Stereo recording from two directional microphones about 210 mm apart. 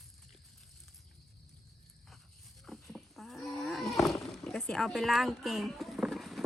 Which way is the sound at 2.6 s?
Centre (ahead or behind).